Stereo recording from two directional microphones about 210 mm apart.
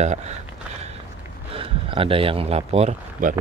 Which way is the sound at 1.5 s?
25° right (ahead or behind).